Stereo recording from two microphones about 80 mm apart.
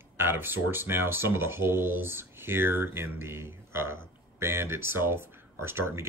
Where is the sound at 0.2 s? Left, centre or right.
Right.